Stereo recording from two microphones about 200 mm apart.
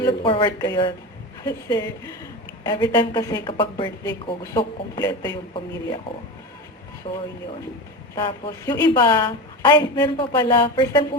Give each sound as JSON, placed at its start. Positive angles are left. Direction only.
{"t": 0.0, "sound": "a woman's voice", "side_deg": 25}
{"t": 7.1, "sound": "speech", "side_deg": 30}